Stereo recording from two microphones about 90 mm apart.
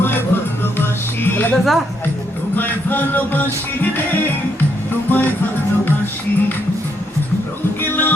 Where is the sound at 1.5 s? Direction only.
Centre (ahead or behind).